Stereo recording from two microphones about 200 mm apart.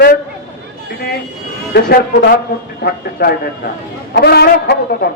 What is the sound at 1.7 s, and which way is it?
A man's voice, 50° left (ahead or behind).